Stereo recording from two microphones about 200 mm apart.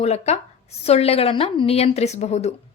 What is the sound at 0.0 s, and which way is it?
A woman's voice, 30° left (ahead or behind).